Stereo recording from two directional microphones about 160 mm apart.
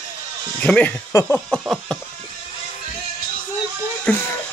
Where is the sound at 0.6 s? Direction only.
10° left (ahead or behind).